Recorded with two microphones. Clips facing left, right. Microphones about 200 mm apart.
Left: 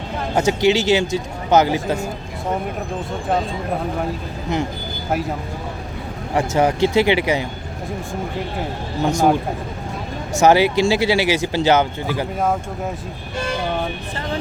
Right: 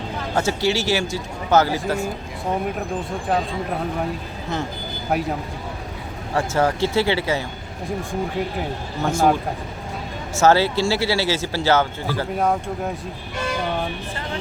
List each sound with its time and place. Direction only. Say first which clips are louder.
0.3 s speech: left 5 dB; 15° left (ahead or behind)
6.3 s speech: left 3 dB; 15° left (ahead or behind)
9.0 s speech: left 3 dB; 15° left (ahead or behind)
10.3 s speech: left 3 dB; 15° left (ahead or behind)
12.4 s speech: right 2 dB; centre (ahead or behind)